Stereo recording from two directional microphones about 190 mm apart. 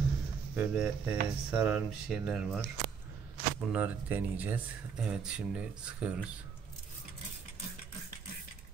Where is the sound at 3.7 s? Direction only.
10° right (ahead or behind).